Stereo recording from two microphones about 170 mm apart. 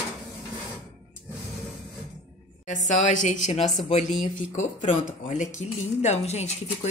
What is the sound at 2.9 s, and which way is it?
A woman's voice, 45° left (ahead or behind).